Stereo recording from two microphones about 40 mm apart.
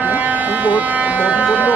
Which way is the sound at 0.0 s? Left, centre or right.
Right.